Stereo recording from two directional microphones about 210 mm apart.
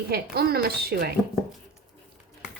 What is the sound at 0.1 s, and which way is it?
Speech, 50° right (ahead or behind).